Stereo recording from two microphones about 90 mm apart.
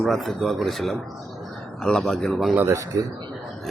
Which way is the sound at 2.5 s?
30° right (ahead or behind).